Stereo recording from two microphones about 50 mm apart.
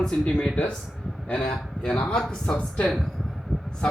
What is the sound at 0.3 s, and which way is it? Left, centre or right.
A woman's voice, left.